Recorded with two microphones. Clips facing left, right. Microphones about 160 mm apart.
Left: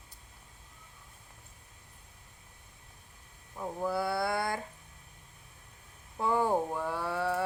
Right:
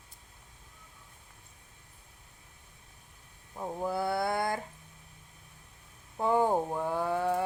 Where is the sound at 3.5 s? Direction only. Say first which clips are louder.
Even; 15° right (ahead or behind).